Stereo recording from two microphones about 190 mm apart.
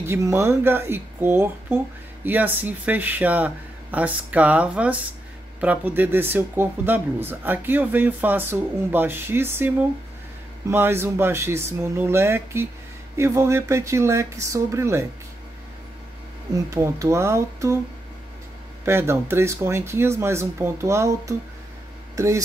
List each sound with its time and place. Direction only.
0.0 s speech: 10° right (ahead or behind)
10.7 s speech: 10° right (ahead or behind)
16.7 s speech: 15° right (ahead or behind)
18.9 s speech: 10° right (ahead or behind)